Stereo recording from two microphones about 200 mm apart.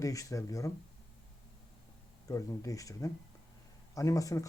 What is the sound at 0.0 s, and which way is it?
Speech, 15° left (ahead or behind).